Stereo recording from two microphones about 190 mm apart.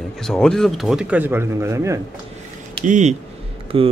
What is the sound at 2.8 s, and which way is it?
Speech, 40° right (ahead or behind).